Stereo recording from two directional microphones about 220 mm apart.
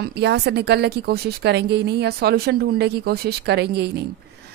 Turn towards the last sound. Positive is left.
turn(degrees=-50)  # may be behind; listen again after turning